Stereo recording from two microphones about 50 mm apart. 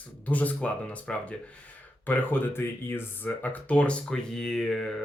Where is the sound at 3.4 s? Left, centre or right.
Left; by 4.9 s centre.